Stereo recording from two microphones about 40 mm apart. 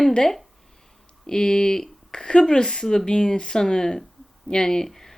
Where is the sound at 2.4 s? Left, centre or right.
Centre.